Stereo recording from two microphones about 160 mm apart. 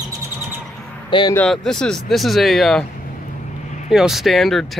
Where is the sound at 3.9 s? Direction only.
Centre (ahead or behind).